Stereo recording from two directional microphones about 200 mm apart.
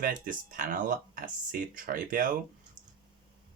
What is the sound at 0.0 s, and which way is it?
Speech, 45° right (ahead or behind).